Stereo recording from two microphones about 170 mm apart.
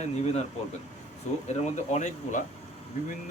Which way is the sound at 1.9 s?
45° left (ahead or behind).